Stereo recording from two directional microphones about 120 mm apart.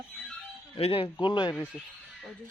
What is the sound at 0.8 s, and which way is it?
Speech, 50° left (ahead or behind).